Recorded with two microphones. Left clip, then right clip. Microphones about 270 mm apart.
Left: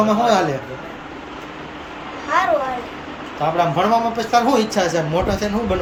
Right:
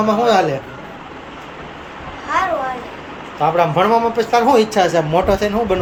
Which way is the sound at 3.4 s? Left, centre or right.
Centre.